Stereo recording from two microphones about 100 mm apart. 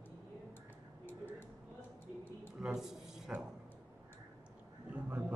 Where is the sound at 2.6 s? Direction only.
5° right (ahead or behind).